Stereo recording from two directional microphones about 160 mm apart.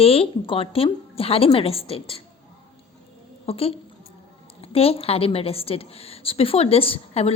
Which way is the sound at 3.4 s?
40° left (ahead or behind).